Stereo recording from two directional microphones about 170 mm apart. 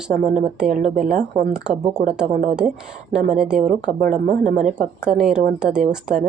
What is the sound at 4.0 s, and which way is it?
Speech, 45° right (ahead or behind).